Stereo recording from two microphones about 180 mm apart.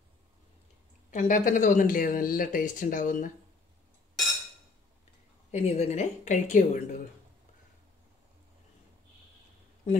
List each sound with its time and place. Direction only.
1.1 s speech: 45° left (ahead or behind)
5.5 s a woman's voice: 35° left (ahead or behind)